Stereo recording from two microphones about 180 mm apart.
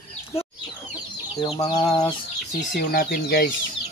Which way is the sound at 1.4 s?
20° left (ahead or behind).